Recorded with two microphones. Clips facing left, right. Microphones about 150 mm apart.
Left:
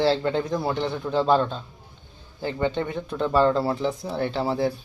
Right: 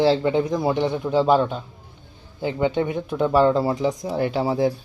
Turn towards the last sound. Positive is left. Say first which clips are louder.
# right 3 dB
turn(degrees=-15)  # may be behind; listen again after turning